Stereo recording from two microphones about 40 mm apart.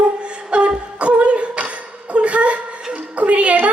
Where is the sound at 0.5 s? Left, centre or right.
Right.